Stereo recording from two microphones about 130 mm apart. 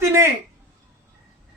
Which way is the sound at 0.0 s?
20° right (ahead or behind).